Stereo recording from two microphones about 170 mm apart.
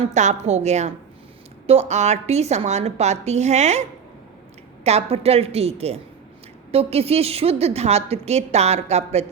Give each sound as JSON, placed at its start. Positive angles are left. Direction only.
{"t": 0.0, "sound": "a woman's voice", "side_deg": -45}